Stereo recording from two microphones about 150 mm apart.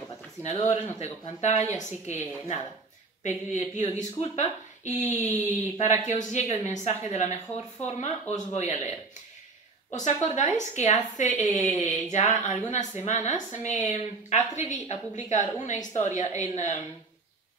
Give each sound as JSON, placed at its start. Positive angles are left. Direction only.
{"t": 0.4, "sound": "a woman's voice", "side_deg": 50}
{"t": 9.9, "sound": "a woman's voice", "side_deg": 50}